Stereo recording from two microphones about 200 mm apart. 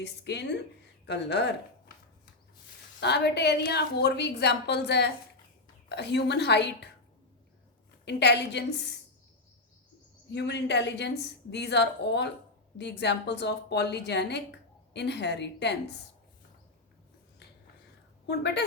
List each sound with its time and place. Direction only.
0.0 s a woman's voice: 60° left (ahead or behind)
3.0 s a woman's voice: 55° left (ahead or behind)
8.0 s a woman's voice: 60° left (ahead or behind)
10.3 s a woman's voice: 60° left (ahead or behind)
18.3 s a woman's voice: 60° left (ahead or behind)